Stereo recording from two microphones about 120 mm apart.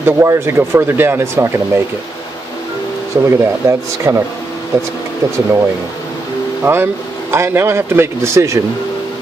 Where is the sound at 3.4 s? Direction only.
25° right (ahead or behind).